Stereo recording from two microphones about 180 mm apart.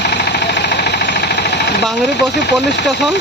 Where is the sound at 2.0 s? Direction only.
70° left (ahead or behind).